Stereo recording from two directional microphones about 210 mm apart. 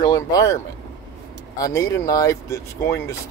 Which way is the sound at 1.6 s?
15° left (ahead or behind).